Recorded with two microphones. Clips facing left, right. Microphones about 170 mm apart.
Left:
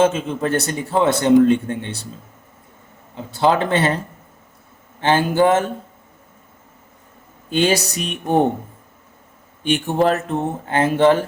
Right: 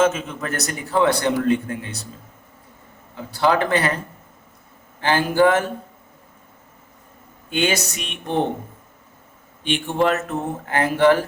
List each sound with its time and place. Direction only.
0.0 s a man's voice: 30° left (ahead or behind)
3.2 s a man's voice: 25° left (ahead or behind)
4.9 s a man's voice: 25° left (ahead or behind)
7.5 s speech: 35° left (ahead or behind)
9.6 s speech: 40° left (ahead or behind)
10.7 s a man's voice: 25° left (ahead or behind)